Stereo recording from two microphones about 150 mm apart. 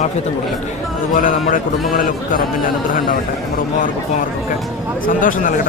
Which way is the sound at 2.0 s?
65° left (ahead or behind).